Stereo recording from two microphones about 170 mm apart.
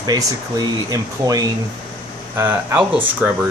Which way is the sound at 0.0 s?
25° right (ahead or behind).